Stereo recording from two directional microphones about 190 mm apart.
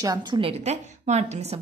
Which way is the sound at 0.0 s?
20° right (ahead or behind).